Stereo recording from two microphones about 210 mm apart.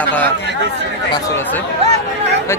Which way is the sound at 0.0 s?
5° left (ahead or behind).